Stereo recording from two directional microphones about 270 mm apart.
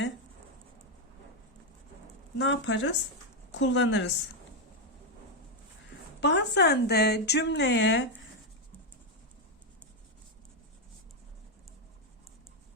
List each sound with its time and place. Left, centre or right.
2.4 s a woman's voice: left
6.1 s a woman's voice: left